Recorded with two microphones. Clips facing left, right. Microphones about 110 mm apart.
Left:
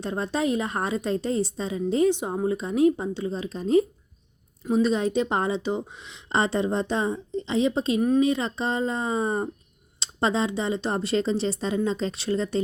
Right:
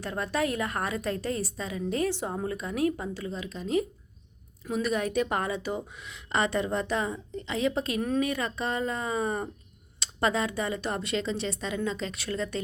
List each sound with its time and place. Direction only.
0.0 s a woman's voice: 25° left (ahead or behind)
4.6 s a woman's voice: 25° left (ahead or behind)